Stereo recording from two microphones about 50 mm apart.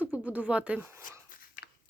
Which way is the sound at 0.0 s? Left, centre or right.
Right.